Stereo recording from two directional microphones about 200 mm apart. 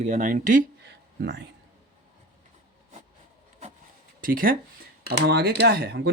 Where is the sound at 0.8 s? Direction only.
60° right (ahead or behind).